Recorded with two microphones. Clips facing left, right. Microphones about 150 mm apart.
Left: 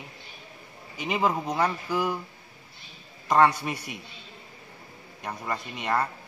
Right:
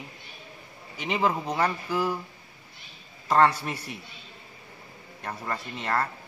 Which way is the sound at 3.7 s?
10° left (ahead or behind).